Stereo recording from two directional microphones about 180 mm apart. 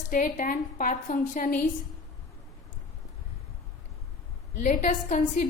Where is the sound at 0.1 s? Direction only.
50° left (ahead or behind).